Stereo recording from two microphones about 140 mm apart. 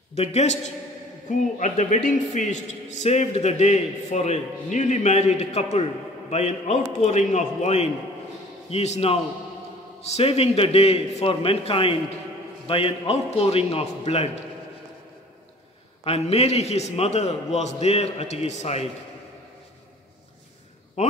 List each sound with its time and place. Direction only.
0.1 s a man's voice: 50° left (ahead or behind)
1.6 s a man's voice: 60° left (ahead or behind)
16.0 s a man's voice: 45° left (ahead or behind)
21.0 s speech: 55° left (ahead or behind)